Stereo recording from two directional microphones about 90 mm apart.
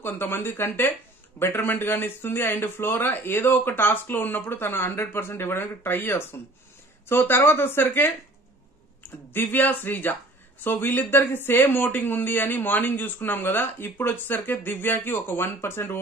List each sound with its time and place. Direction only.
0.0 s speech: 25° left (ahead or behind)